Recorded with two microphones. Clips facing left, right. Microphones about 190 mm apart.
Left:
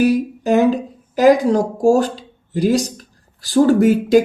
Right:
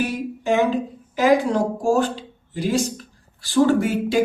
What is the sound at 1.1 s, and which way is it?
Speech, 40° left (ahead or behind).